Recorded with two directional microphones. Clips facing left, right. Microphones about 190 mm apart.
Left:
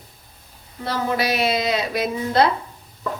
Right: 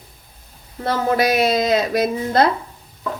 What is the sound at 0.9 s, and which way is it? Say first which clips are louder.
A woman's voice: right 4 dB; 50° right (ahead or behind).